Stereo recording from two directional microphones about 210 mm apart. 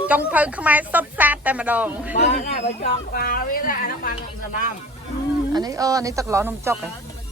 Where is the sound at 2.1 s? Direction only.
35° left (ahead or behind).